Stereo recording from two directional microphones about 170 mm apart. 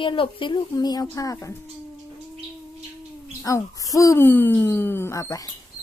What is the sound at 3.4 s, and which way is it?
Speech, 20° left (ahead or behind).